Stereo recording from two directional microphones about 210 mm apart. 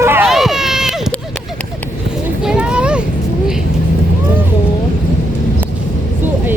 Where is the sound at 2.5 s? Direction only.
5° right (ahead or behind).